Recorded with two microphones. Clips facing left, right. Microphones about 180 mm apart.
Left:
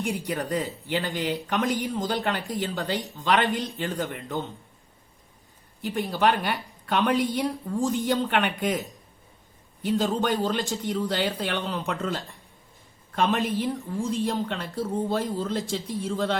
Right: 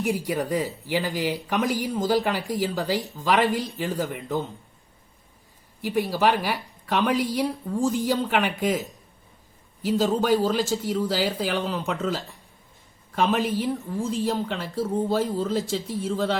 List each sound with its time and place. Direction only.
0.0 s speech: 5° right (ahead or behind)
5.8 s speech: 5° right (ahead or behind)